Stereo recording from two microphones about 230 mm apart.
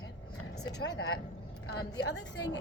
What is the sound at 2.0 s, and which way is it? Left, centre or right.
Speech, left.